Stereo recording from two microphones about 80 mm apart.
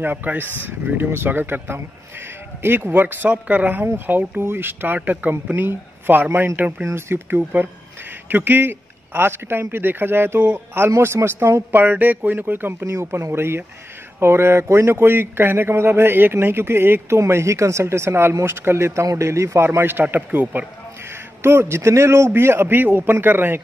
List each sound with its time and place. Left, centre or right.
0.0 s speech: right
21.4 s speech: right